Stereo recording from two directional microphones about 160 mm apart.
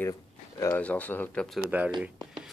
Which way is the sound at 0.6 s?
15° left (ahead or behind).